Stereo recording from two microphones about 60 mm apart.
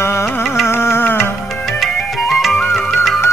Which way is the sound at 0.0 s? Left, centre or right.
Left.